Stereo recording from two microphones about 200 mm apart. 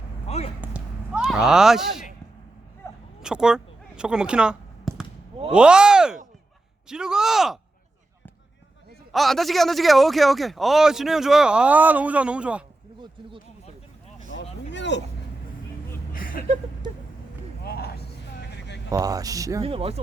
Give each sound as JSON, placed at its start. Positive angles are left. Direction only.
{"t": 0.3, "sound": "basketball bounce", "side_deg": 30}
{"t": 0.6, "sound": "basketball bounce", "side_deg": -5}
{"t": 3.2, "sound": "a sound", "side_deg": -5}
{"t": 5.5, "sound": "speech", "side_deg": -5}
{"t": 9.1, "sound": "speech", "side_deg": 0}
{"t": 14.7, "sound": "vehicle", "side_deg": 60}
{"t": 16.1, "sound": "a sound", "side_deg": 45}
{"t": 17.6, "sound": "a sound", "side_deg": 50}
{"t": 18.9, "sound": "speech", "side_deg": -20}
{"t": 19.6, "sound": "speech", "side_deg": -30}